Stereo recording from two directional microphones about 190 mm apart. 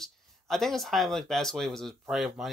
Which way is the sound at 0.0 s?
Centre (ahead or behind).